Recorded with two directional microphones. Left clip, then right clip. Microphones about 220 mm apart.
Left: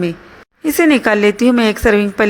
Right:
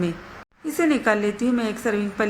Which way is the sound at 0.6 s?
40° left (ahead or behind).